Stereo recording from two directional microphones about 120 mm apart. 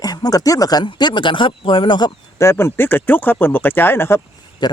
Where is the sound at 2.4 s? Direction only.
20° left (ahead or behind).